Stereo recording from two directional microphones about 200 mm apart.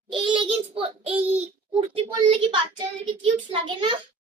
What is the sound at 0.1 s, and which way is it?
A child's voice, 25° right (ahead or behind).